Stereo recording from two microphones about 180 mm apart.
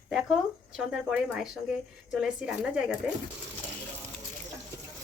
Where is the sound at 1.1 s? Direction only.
5° right (ahead or behind).